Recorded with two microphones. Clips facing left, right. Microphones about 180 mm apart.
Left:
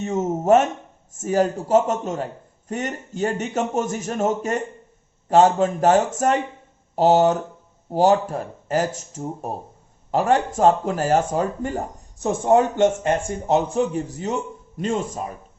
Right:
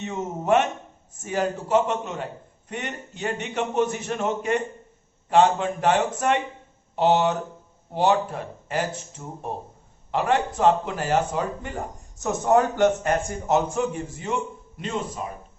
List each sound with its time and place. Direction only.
0.0 s speech: 45° left (ahead or behind)
12.3 s a man's voice: 25° left (ahead or behind); by 15.3 s 45° left (ahead or behind)